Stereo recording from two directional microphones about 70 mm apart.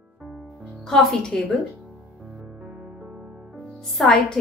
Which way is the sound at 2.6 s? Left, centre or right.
Right.